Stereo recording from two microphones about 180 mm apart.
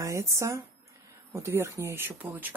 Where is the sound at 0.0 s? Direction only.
15° right (ahead or behind).